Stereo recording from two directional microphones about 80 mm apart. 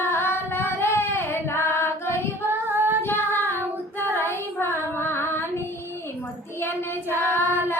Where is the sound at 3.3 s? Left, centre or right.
Left.